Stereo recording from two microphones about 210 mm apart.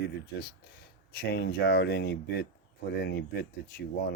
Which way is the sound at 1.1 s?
50° left (ahead or behind).